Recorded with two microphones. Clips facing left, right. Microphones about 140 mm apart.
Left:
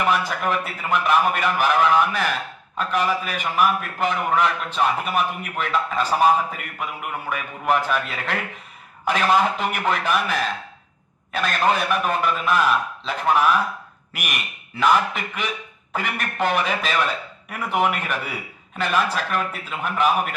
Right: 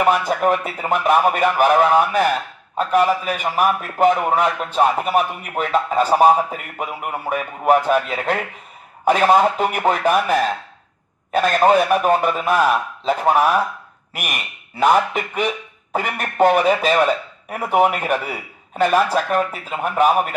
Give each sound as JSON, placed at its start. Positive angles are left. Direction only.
{"t": 0.0, "sound": "a man's voice", "side_deg": -45}